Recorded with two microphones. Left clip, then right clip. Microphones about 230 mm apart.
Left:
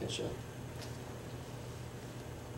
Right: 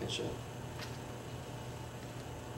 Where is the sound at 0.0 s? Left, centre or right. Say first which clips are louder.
Right 1 dB; left.